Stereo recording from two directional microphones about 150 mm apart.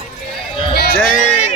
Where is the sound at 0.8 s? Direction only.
80° left.